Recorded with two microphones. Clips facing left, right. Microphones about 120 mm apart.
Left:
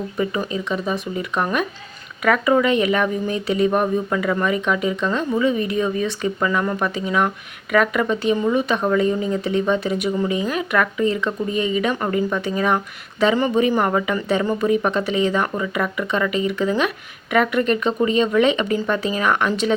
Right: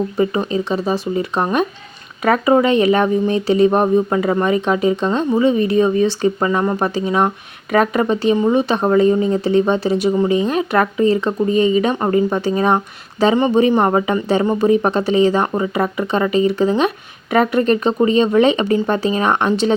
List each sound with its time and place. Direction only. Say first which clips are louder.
0.2 s speech: right 4 dB; 30° right (ahead or behind)